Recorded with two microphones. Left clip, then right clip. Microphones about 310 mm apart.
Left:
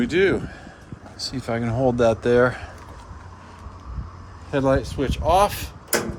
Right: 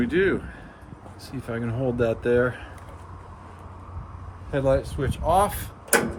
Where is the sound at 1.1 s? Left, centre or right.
Left.